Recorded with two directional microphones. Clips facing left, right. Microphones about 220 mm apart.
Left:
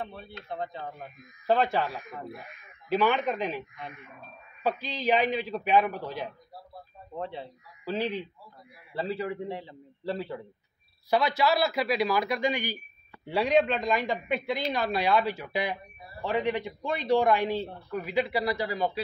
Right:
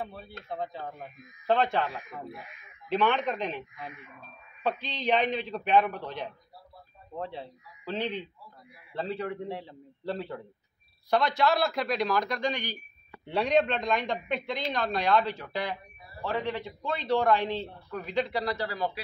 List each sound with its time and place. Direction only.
0.0 s speech: 5° right (ahead or behind)
2.2 s speech: 45° left (ahead or behind)
2.9 s a man's voice: 5° left (ahead or behind)